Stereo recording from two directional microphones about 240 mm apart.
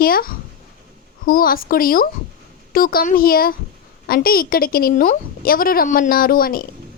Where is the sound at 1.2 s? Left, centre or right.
Left.